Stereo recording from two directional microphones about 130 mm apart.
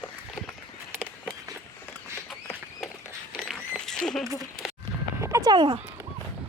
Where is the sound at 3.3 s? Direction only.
Centre (ahead or behind).